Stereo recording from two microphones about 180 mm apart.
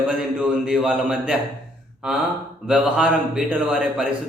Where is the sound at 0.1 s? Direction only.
5° right (ahead or behind).